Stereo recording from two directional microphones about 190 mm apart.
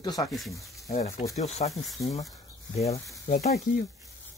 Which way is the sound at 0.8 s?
35° left (ahead or behind).